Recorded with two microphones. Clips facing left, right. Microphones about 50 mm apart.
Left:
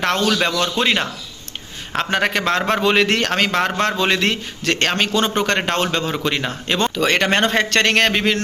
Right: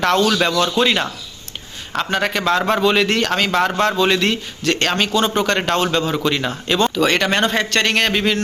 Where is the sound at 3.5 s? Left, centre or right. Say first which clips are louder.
Right 2 dB; left.